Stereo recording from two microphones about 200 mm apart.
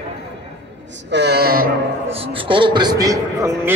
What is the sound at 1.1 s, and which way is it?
Speech, 55° right (ahead or behind).